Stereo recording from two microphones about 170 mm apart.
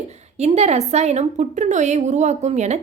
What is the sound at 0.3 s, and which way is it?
A woman's voice, 40° right (ahead or behind).